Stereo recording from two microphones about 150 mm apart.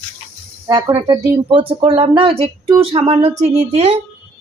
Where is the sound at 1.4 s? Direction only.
35° right (ahead or behind).